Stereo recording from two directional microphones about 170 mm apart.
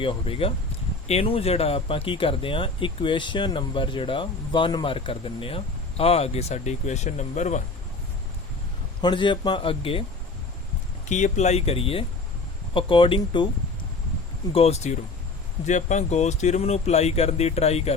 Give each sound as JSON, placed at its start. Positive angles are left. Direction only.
{"t": 0.0, "sound": "speech", "side_deg": 30}
{"t": 9.0, "sound": "a man's voice", "side_deg": 25}
{"t": 11.1, "sound": "a man's voice", "side_deg": 45}
{"t": 14.5, "sound": "speech", "side_deg": 35}